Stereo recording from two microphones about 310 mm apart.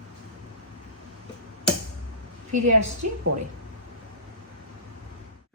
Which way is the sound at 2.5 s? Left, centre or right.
Right.